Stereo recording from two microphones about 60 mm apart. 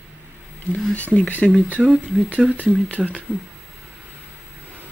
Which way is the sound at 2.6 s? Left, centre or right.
Centre.